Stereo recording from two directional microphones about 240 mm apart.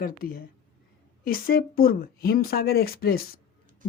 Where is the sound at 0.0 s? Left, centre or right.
Left.